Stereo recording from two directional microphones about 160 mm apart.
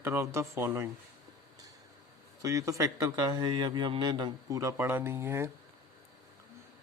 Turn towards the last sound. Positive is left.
turn(degrees=-15)  # may be behind; listen again after turning